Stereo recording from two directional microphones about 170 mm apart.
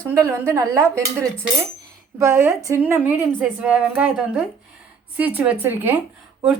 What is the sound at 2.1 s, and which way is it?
Speech, 15° right (ahead or behind).